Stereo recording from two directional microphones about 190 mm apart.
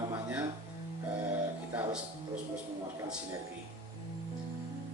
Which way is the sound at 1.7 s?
10° right (ahead or behind).